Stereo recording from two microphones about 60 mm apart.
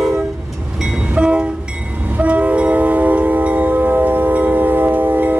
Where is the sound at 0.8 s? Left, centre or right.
Centre.